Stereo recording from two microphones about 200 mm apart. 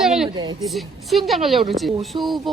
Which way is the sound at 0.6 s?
Centre (ahead or behind).